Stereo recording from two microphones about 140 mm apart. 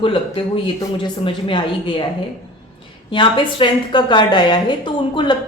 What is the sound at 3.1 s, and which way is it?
A woman's voice, 35° left (ahead or behind).